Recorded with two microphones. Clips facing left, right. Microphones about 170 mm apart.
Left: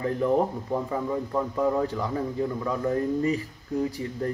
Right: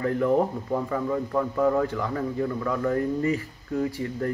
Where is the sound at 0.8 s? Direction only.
20° left (ahead or behind).